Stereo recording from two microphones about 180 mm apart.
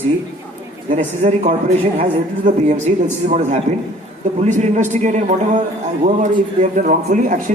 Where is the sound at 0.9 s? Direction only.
40° right (ahead or behind).